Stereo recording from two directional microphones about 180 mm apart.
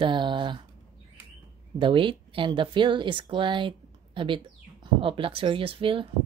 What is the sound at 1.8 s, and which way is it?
Speech, 30° right (ahead or behind).